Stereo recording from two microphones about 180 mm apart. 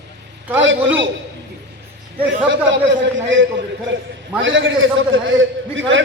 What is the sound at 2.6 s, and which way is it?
A man's voice, 90° right.